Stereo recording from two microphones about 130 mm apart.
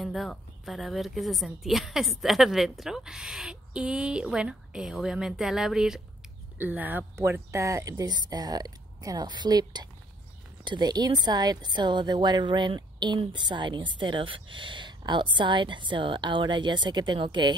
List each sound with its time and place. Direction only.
0.0 s a woman's voice: centre (ahead or behind); by 17.6 s 35° right (ahead or behind)